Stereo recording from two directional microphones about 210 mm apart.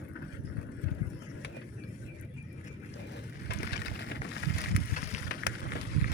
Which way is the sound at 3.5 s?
50° left (ahead or behind).